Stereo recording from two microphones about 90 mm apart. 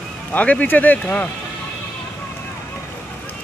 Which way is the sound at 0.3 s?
15° left (ahead or behind).